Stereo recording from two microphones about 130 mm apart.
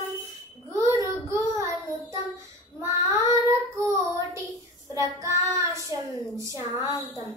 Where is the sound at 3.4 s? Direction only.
25° right (ahead or behind).